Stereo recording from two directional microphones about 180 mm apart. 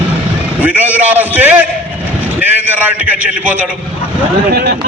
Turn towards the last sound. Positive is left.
turn(degrees=-60)  # may be behind; listen again after turning